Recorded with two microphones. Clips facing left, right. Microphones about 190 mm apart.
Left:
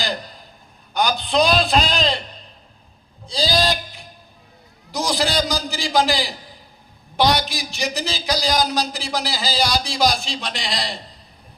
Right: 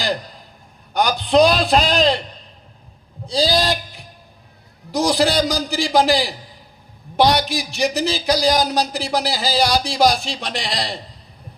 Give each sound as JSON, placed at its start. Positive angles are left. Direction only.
{"t": 0.9, "sound": "a man's voice", "side_deg": -60}
{"t": 3.2, "sound": "a sound", "side_deg": -65}
{"t": 4.9, "sound": "a man's voice", "side_deg": -60}